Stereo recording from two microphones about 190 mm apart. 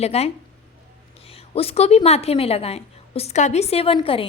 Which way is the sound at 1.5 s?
30° left (ahead or behind).